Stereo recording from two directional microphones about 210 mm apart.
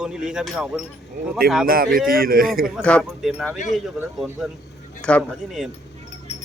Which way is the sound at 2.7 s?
5° left (ahead or behind).